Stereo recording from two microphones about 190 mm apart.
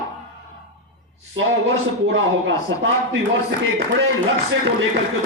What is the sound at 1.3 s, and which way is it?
Speech, 85° right.